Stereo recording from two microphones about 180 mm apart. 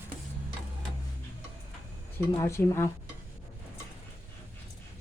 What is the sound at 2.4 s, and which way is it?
Speech, 15° left (ahead or behind).